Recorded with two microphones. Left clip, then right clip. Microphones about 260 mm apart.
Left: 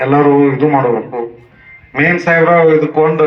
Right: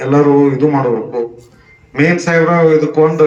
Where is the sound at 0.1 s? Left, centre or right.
Left.